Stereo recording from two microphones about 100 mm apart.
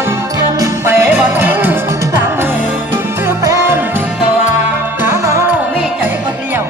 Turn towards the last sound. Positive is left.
turn(degrees=-30)  # may be behind; listen again after turning